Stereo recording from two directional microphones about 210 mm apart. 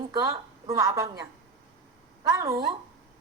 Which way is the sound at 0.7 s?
15° right (ahead or behind).